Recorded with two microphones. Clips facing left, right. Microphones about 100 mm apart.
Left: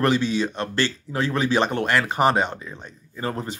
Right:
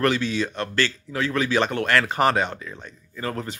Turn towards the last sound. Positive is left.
turn(degrees=25)  # may be behind; listen again after turning